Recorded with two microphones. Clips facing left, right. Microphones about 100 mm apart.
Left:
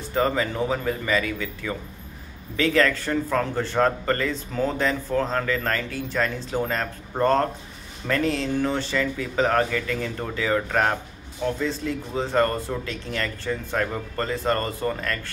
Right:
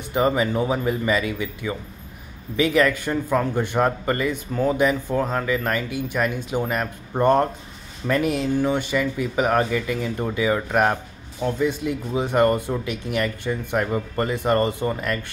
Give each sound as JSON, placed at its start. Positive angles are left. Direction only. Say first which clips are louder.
{"t": 0.1, "sound": "a man's voice", "louder": "right 3 dB", "side_deg": -15}